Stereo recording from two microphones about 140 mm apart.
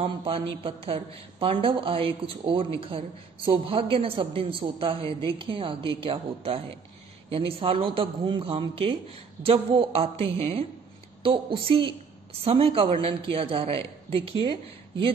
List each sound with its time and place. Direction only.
0.0 s a woman's voice: 40° right (ahead or behind)